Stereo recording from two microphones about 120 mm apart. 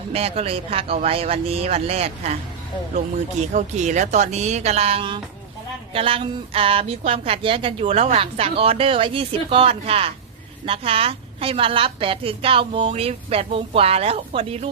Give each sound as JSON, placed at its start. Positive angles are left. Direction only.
{"t": 0.1, "sound": "a woman's voice", "side_deg": -55}
{"t": 3.5, "sound": "a woman's voice", "side_deg": -80}